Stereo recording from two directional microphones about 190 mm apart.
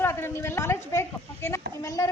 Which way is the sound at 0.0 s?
10° left (ahead or behind).